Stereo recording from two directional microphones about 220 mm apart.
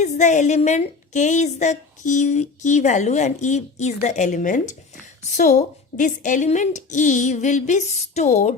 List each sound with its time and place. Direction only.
0.0 s a woman's voice: 35° left (ahead or behind)